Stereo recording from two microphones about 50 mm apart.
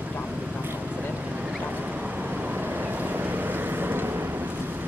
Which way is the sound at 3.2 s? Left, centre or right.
Right.